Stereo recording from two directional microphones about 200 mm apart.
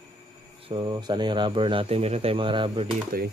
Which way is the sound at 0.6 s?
25° right (ahead or behind).